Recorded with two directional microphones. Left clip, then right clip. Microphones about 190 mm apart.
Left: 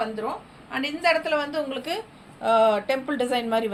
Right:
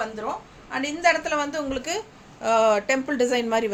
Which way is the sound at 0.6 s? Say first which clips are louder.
Right 2 dB; 20° right (ahead or behind).